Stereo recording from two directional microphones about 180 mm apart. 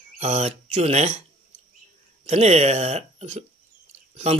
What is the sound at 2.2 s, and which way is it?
Speech, 35° right (ahead or behind).